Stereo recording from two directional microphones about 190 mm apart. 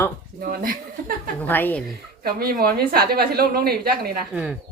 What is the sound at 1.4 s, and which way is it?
Speech, 10° left (ahead or behind).